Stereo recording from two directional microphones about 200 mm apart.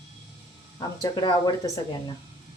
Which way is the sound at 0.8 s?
15° left (ahead or behind).